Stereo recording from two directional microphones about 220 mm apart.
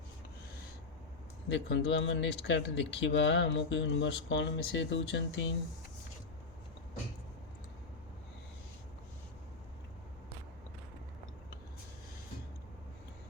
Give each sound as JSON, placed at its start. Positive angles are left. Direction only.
{"t": 1.5, "sound": "speech", "side_deg": 55}